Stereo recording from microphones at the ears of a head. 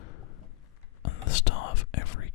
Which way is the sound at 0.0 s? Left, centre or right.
Left.